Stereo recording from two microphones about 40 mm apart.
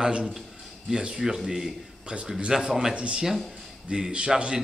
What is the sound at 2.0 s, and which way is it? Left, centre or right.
Speech, right.